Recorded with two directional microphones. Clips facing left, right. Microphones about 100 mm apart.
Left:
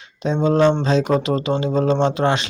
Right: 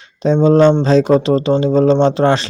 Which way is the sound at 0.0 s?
35° right (ahead or behind).